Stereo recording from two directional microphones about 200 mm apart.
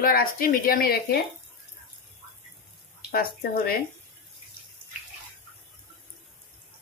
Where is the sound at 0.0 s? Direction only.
45° left (ahead or behind).